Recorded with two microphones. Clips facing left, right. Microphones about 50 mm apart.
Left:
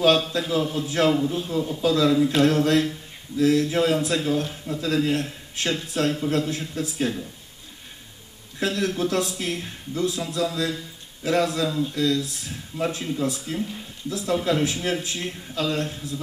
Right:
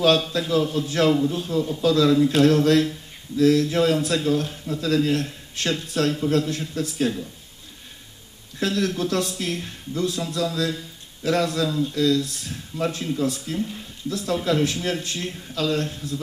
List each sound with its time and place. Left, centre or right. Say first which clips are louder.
0.5 s a man's voice: right 2 dB; centre
8.5 s a man's voice: right 1 dB; centre